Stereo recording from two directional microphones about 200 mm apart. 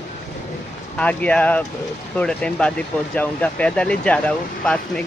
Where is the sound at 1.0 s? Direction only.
5° left (ahead or behind).